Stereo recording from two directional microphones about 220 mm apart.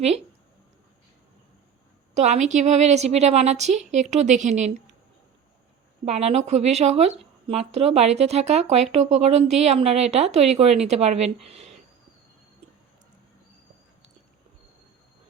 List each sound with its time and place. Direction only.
2.1 s a woman's voice: 30° right (ahead or behind)
6.1 s a woman's voice: 30° right (ahead or behind)